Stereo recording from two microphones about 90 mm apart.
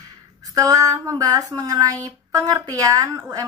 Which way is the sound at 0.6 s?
40° right (ahead or behind).